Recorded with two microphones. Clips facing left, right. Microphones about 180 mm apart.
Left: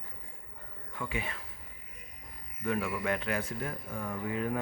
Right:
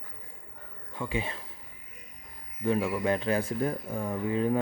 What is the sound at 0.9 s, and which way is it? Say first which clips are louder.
Speech: right 4 dB; 25° right (ahead or behind).